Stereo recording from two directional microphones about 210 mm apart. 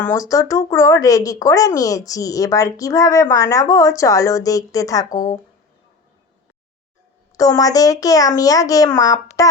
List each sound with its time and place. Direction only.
0.0 s speech: 15° left (ahead or behind)
7.3 s speech: 15° left (ahead or behind)